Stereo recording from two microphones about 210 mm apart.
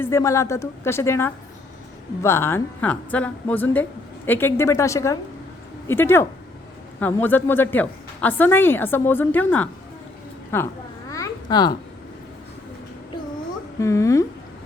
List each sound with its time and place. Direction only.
0.0 s a woman's voice: 15° left (ahead or behind)
11.1 s babbling: 20° left (ahead or behind)
13.7 s a woman's voice: 15° left (ahead or behind)